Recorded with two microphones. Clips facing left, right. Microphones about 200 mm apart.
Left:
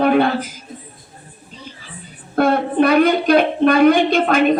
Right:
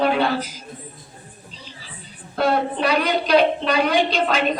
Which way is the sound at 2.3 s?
50° left (ahead or behind).